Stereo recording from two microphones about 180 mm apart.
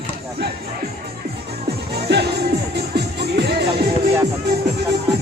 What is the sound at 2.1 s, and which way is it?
Music, 70° right (ahead or behind).